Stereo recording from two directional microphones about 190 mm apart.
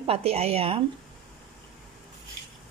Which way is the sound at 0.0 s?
30° right (ahead or behind).